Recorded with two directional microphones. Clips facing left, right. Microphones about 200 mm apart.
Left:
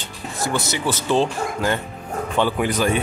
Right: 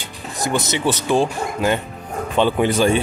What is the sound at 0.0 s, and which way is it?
Speech, 20° right (ahead or behind).